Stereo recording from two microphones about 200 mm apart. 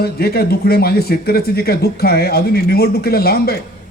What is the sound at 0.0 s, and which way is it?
Speech, 50° left (ahead or behind).